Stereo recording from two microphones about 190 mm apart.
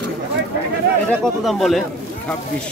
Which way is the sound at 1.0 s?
Centre (ahead or behind).